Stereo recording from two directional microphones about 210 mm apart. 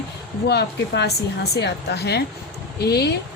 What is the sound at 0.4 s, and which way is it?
A woman's voice, 50° left (ahead or behind).